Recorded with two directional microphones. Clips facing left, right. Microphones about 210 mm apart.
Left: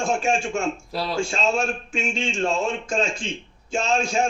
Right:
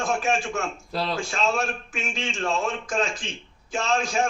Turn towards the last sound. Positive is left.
turn(degrees=25)  # may be behind; listen again after turning